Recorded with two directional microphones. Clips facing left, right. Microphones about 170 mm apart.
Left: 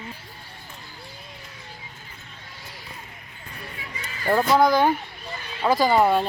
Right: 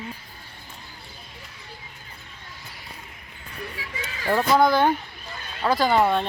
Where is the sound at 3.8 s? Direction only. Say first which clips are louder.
Right 1 dB; 90° right.